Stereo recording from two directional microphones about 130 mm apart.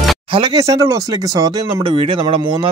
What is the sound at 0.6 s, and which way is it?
Speech, 25° right (ahead or behind).